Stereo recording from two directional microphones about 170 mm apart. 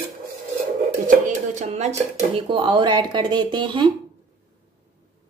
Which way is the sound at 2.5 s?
30° right (ahead or behind).